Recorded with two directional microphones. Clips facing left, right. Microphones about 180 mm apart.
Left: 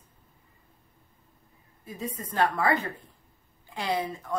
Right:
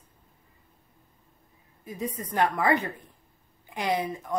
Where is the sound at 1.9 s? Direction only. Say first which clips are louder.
Right 3 dB; 20° right (ahead or behind).